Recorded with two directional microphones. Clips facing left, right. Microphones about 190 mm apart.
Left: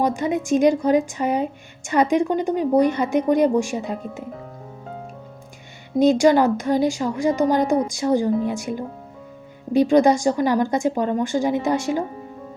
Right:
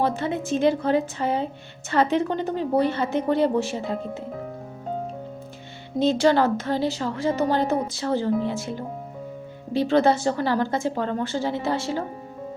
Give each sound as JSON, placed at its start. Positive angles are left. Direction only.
{"t": 0.0, "sound": "a woman's voice", "side_deg": 15}
{"t": 5.9, "sound": "a woman's voice", "side_deg": 15}